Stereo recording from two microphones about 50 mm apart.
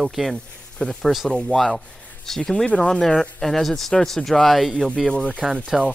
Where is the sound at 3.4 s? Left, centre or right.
Centre.